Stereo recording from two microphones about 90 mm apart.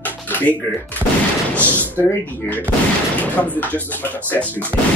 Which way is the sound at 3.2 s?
20° left (ahead or behind).